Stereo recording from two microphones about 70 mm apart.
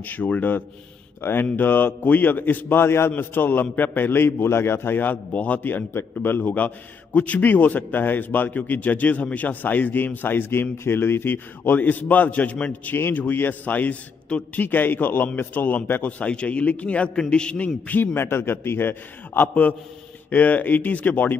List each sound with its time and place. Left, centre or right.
0.0 s a man's voice: left
17.8 s a man's voice: left